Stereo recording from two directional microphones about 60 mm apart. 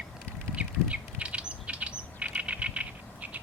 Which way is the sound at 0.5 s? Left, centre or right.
Right.